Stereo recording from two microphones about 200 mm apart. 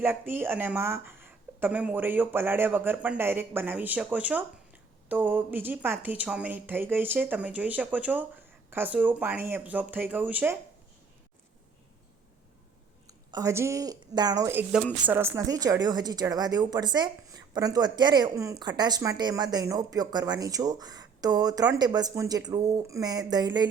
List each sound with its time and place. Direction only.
0.0 s speech: 10° right (ahead or behind)
13.1 s a woman's voice: 15° right (ahead or behind)